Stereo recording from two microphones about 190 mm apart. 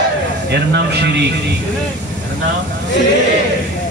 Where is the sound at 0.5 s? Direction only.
60° right (ahead or behind).